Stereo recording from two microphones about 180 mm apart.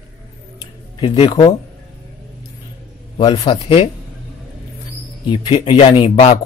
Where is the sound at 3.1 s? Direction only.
25° left (ahead or behind).